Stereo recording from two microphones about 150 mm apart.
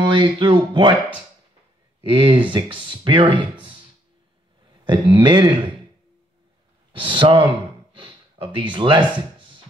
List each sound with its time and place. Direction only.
0.0 s speech: 30° right (ahead or behind)
2.0 s speech: 35° right (ahead or behind)
4.8 s speech: 30° right (ahead or behind)
6.9 s speech: 35° right (ahead or behind)
7.9 s a sound: 35° right (ahead or behind)